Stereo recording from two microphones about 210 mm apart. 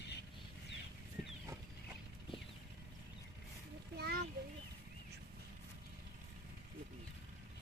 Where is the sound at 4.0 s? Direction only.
50° right (ahead or behind).